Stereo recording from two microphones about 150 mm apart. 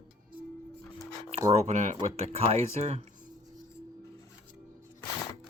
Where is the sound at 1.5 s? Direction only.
55° right (ahead or behind).